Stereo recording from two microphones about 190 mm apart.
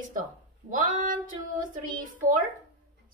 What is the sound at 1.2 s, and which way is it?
A woman's voice, 45° right (ahead or behind).